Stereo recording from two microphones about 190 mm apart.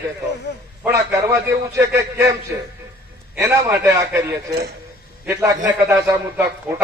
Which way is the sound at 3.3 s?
10° right (ahead or behind).